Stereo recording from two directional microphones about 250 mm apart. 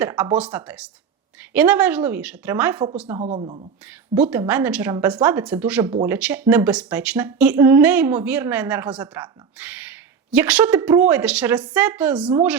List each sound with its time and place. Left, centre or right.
0.0 s a woman's voice: centre
3.2 s speech: right
3.8 s a woman's voice: centre